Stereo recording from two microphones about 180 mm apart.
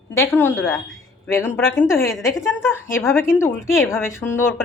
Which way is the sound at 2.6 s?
15° left (ahead or behind).